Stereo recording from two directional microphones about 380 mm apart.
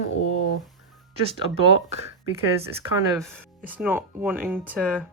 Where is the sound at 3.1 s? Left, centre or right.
Centre.